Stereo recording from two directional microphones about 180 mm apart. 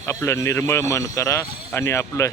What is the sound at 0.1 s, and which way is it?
Speech, 15° left (ahead or behind).